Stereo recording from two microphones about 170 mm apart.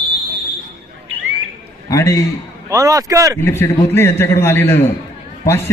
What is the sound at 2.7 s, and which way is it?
Speech, 20° right (ahead or behind).